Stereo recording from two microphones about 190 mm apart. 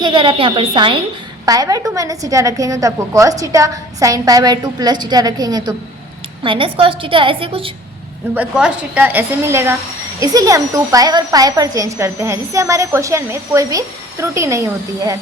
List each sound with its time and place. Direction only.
0.0 s a woman's voice: 25° right (ahead or behind)
8.4 s speech: 5° right (ahead or behind)